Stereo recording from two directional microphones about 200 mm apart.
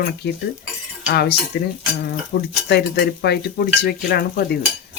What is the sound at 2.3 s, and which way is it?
Cutlery, 60° left (ahead or behind).